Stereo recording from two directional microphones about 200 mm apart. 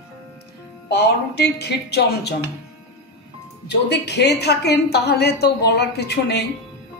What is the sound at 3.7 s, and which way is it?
A woman's voice, 55° left (ahead or behind).